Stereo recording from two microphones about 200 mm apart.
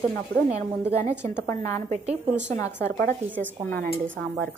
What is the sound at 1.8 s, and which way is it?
Speech, 30° right (ahead or behind).